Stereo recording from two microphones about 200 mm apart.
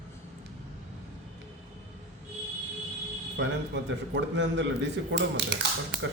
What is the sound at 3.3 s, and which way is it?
A man's voice, 60° right (ahead or behind).